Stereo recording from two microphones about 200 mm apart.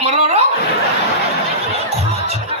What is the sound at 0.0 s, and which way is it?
Chuckle, 30° right (ahead or behind).